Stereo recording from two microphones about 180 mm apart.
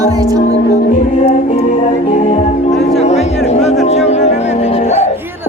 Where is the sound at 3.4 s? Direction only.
40° left (ahead or behind).